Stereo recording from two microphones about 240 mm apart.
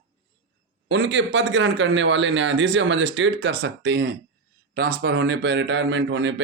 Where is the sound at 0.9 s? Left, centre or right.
Right.